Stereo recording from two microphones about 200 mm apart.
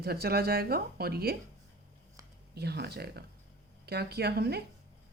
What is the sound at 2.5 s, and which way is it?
Speech, 55° right (ahead or behind).